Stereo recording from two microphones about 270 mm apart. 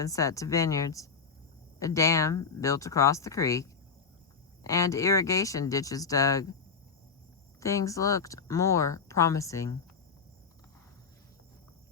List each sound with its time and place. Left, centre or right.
0.0 s speech: centre
7.6 s speech: centre